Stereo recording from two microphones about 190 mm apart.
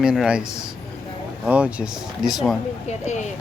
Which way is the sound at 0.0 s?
5° right (ahead or behind).